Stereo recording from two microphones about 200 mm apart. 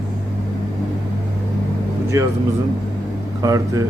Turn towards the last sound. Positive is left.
turn(degrees=-15)  # may be behind; listen again after turning